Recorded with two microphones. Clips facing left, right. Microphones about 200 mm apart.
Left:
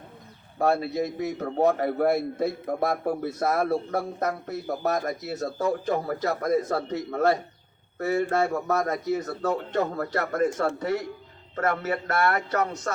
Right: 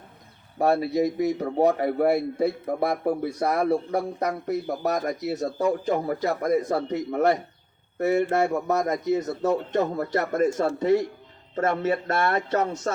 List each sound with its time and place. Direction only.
0.9 s a man's voice: 15° right (ahead or behind)